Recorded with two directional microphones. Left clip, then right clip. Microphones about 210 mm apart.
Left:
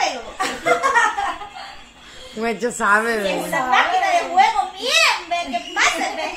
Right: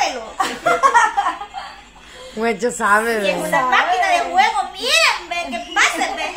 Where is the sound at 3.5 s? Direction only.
30° right (ahead or behind).